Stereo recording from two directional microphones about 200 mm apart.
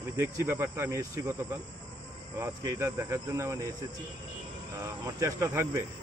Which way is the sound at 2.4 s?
15° right (ahead or behind).